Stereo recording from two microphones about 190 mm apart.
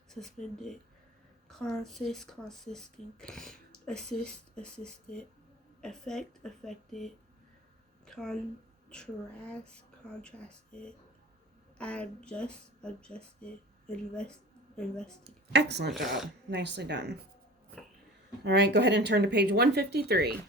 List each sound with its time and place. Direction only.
0.1 s speech: centre (ahead or behind)
1.5 s speech: 5° left (ahead or behind)
15.2 s speech: 60° right (ahead or behind)
15.9 s speech: centre (ahead or behind)
16.5 s speech: 65° right (ahead or behind)
18.4 s speech: 60° right (ahead or behind)